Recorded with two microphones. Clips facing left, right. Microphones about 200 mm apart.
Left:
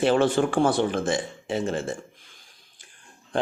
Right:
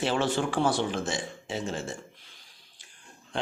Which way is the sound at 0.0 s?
50° left (ahead or behind).